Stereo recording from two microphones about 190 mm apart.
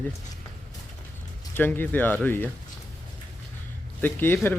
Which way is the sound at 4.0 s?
10° left (ahead or behind).